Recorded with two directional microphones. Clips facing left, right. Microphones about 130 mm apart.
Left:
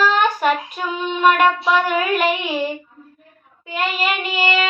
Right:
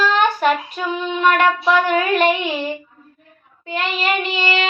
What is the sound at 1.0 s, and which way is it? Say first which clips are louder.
Child singing: left 1 dB; 10° left (ahead or behind).